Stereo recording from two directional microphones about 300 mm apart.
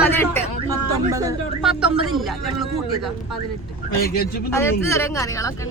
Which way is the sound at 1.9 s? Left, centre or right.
Centre.